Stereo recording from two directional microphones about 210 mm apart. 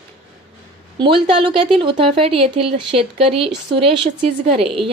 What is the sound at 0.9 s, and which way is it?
Speech, 25° right (ahead or behind).